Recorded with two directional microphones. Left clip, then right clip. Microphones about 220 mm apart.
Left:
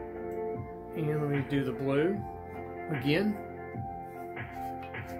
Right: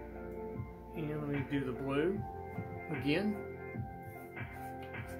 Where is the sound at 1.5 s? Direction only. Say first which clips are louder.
Left 5 dB; 20° left (ahead or behind).